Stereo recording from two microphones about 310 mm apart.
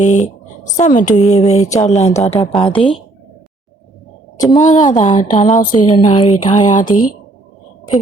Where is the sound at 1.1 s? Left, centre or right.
Left.